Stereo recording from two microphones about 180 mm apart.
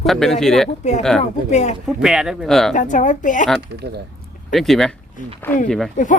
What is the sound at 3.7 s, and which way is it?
Speech, 70° right (ahead or behind).